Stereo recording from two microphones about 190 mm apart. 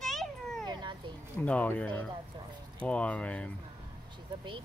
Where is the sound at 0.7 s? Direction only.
25° right (ahead or behind).